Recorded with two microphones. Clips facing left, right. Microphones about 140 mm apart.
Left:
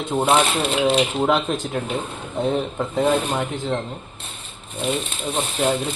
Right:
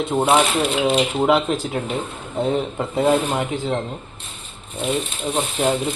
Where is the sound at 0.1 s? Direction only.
5° right (ahead or behind).